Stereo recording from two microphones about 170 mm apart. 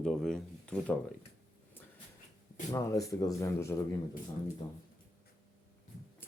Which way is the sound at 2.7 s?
20° left (ahead or behind).